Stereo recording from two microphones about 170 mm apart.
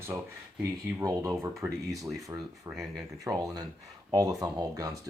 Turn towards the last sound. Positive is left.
turn(degrees=-20)  # may be behind; listen again after turning